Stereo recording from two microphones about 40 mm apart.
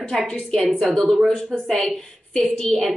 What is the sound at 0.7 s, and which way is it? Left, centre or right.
Speech, left.